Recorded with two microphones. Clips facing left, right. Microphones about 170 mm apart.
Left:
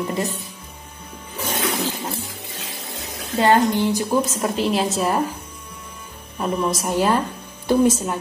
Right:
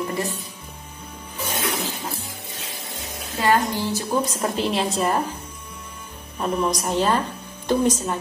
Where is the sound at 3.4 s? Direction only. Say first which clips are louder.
Left 4 dB; 20° left (ahead or behind).